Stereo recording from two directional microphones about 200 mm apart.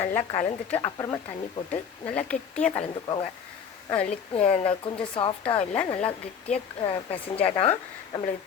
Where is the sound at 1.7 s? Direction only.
5° left (ahead or behind).